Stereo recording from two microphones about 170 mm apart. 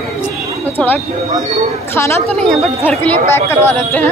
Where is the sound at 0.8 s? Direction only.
5° left (ahead or behind).